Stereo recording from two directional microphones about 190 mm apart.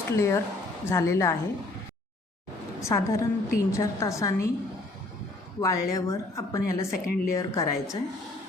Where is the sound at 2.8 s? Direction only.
15° left (ahead or behind).